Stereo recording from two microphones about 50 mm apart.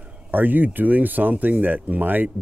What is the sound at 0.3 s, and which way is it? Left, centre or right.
Speech, right.